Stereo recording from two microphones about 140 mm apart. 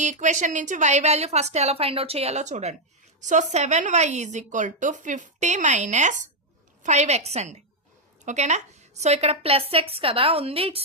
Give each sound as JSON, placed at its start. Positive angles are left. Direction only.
{"t": 0.0, "sound": "a woman's voice", "side_deg": -60}